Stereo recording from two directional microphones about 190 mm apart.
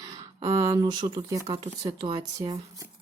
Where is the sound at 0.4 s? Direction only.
20° right (ahead or behind).